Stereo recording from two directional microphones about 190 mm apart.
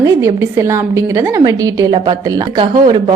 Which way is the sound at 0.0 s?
15° right (ahead or behind).